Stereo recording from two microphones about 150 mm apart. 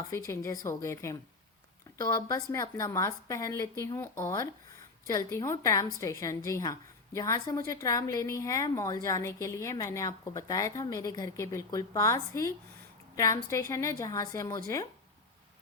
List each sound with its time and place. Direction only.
0.3 s a woman's voice: 20° left (ahead or behind)